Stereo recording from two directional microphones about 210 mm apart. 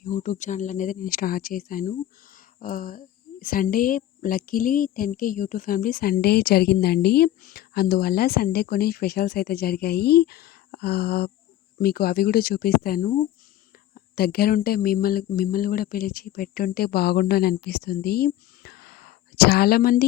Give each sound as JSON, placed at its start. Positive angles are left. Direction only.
{"t": 0.2, "sound": "speech", "side_deg": 35}